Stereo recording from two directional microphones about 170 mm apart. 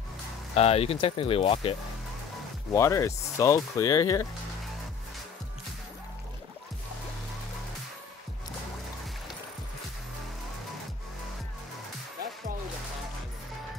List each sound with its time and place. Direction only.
0.6 s speech: 35° left (ahead or behind)
2.7 s speech: 15° left (ahead or behind)